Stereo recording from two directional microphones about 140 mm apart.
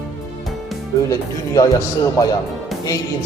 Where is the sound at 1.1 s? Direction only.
25° left (ahead or behind).